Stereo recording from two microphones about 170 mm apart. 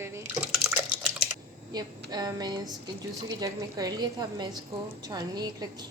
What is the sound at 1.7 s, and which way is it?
Speech, 25° right (ahead or behind).